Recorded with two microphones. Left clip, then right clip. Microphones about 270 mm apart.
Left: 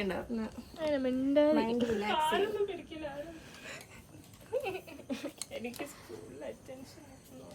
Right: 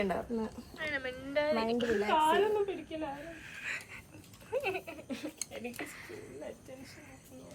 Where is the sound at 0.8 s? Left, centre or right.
Centre.